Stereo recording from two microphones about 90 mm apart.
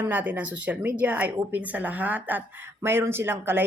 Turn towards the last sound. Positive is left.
turn(degrees=-25)  # may be behind; listen again after turning